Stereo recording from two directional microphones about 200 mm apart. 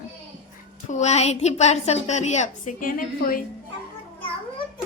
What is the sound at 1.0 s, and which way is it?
A woman's voice, 35° left (ahead or behind).